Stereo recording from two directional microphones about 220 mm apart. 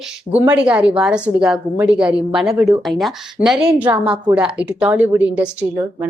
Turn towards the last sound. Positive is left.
turn(degrees=-5)  # may be behind; listen again after turning